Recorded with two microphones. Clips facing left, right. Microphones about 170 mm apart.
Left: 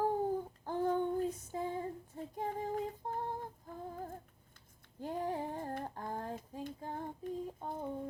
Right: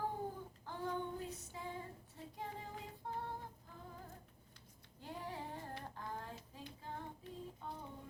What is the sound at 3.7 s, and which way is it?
Music, 50° left (ahead or behind).